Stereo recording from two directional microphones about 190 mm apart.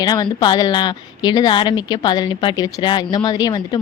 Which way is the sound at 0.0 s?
20° left (ahead or behind).